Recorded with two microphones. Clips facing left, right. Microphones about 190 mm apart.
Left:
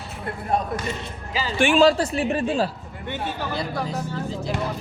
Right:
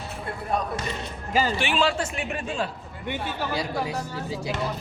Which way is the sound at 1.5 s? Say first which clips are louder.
Left 7 dB; 45° left (ahead or behind).